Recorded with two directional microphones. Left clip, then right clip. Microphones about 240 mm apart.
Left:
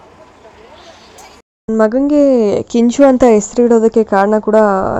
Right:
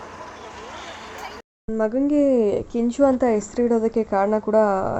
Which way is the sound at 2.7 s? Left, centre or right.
Left.